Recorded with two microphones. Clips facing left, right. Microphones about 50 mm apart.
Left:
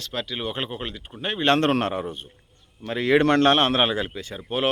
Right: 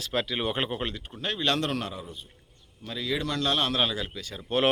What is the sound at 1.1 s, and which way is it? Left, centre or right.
Speech, left.